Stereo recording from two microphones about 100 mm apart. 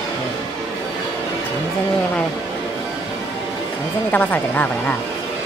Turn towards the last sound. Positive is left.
turn(degrees=15)  # may be behind; listen again after turning